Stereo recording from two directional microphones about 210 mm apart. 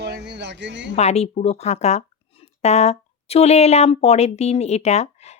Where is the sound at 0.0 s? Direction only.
55° right (ahead or behind).